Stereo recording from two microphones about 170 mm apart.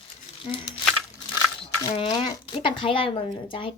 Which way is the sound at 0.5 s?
40° left (ahead or behind).